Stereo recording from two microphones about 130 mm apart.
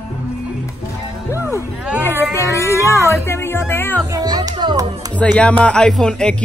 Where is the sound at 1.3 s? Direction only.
20° left (ahead or behind).